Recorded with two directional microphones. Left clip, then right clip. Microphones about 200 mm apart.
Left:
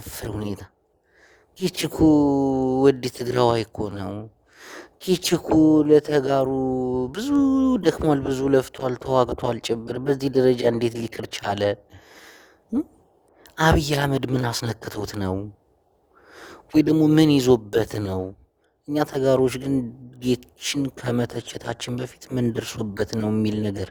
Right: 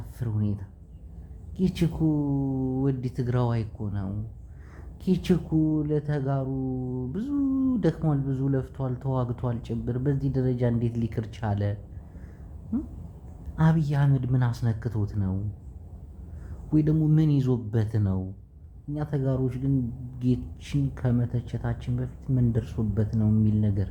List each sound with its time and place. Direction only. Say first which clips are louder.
0.1 s speech: left 5 dB; 60° left (ahead or behind)
13.6 s speech: left 10 dB; 60° left (ahead or behind)
16.4 s speech: left 6 dB; 60° left (ahead or behind)